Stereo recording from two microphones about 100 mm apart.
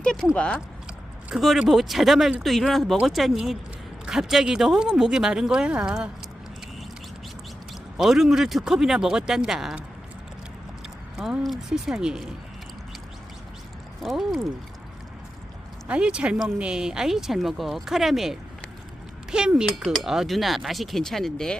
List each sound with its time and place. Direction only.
0.0 s speech: 10° left (ahead or behind)
1.4 s speech: centre (ahead or behind)
7.9 s speech: 5° right (ahead or behind)
11.2 s speech: 5° right (ahead or behind)
14.0 s speech: centre (ahead or behind)
15.9 s speech: 10° right (ahead or behind); by 21.6 s 5° left (ahead or behind)